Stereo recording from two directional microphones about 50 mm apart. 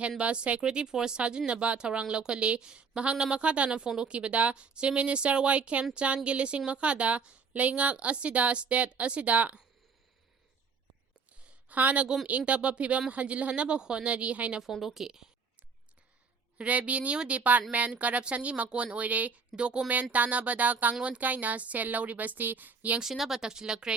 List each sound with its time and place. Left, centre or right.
0.2 s speech: right
11.3 s a sound: right
12.0 s speech: centre
14.6 s a woman's voice: centre
16.6 s a woman's voice: right
23.0 s speech: centre